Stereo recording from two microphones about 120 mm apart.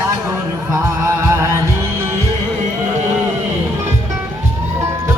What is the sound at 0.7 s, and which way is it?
Music, 25° right (ahead or behind).